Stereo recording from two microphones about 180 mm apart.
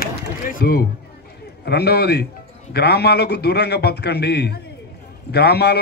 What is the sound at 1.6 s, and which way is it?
A man's voice, 65° left (ahead or behind).